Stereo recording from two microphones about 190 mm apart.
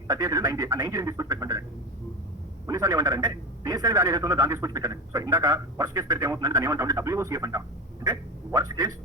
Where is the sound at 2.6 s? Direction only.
20° right (ahead or behind).